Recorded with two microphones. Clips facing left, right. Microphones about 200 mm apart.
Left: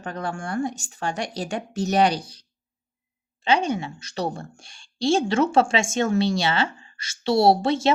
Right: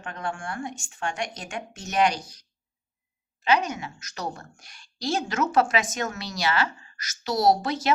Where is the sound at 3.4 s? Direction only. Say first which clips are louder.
Left 2 dB; 30° left (ahead or behind).